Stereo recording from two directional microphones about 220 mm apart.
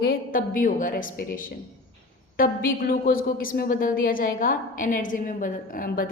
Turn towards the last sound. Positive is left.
turn(degrees=40)  # may be behind; listen again after turning